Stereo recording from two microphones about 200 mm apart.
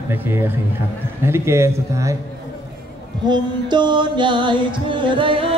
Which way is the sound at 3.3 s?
20° right (ahead or behind).